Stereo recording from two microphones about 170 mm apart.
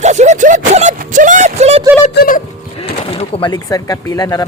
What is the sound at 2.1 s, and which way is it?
Speech, 60° left (ahead or behind).